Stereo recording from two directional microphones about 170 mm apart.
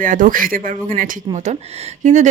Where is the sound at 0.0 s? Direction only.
50° right (ahead or behind).